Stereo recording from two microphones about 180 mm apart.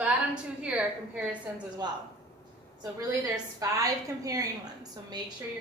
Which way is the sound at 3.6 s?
20° right (ahead or behind).